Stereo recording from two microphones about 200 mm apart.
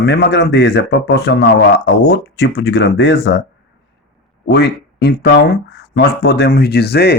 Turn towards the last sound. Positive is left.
turn(degrees=55)  # may be behind; listen again after turning